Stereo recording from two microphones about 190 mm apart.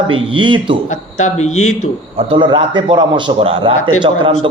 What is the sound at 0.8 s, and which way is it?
Speech, 40° left (ahead or behind).